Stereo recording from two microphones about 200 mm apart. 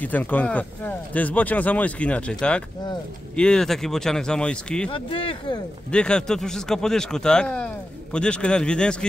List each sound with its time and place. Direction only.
0.0 s speech: 10° left (ahead or behind)
4.9 s speech: 25° left (ahead or behind)
5.9 s speech: 5° left (ahead or behind)